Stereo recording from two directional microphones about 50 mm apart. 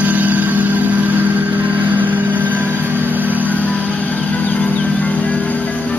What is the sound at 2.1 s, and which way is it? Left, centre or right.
Vehicle, right.